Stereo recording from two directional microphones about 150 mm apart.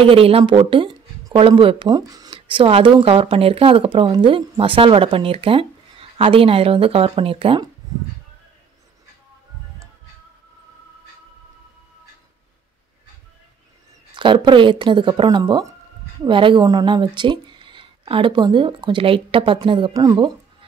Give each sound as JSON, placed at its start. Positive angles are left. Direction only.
{"t": 0.0, "sound": "speech", "side_deg": -40}
{"t": 14.1, "sound": "speech", "side_deg": -30}